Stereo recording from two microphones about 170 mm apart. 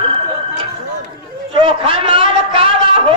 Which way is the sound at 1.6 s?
30° right (ahead or behind).